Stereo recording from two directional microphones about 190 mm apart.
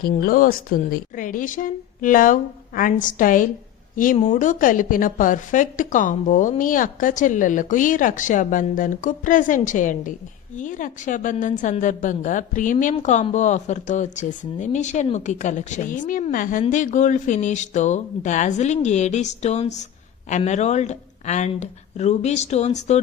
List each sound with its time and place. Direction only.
0.0 s a woman's voice: 50° left (ahead or behind); by 23.0 s 35° left (ahead or behind)